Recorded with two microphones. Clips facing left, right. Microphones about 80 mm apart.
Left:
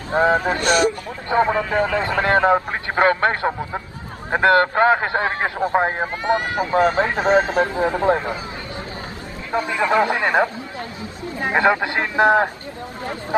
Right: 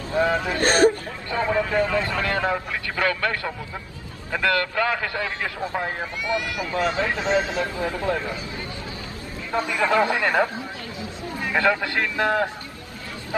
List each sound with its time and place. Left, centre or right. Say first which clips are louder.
0.1 s a man's voice: left 5 dB; left
0.6 s speech: even; right
1.3 s a man's voice: left 4 dB; left
2.5 s a man's voice: left 8 dB; left
7.7 s a man's voice: left 7 dB; left
9.5 s a man's voice: left 2 dB; left